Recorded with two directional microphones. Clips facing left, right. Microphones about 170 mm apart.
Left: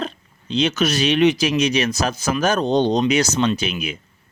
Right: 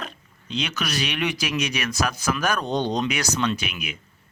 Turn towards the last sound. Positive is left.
turn(degrees=30)  # may be behind; listen again after turning